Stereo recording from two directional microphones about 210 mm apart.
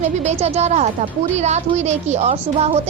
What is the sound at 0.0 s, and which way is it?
A woman's voice, 30° right (ahead or behind).